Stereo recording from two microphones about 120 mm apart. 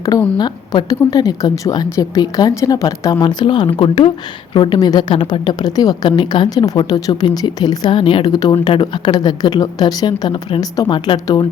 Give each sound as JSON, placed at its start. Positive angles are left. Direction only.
{"t": 0.3, "sound": "a woman's voice", "side_deg": 35}